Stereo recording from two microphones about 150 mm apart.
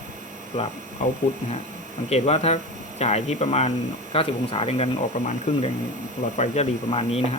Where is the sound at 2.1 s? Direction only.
45° left (ahead or behind).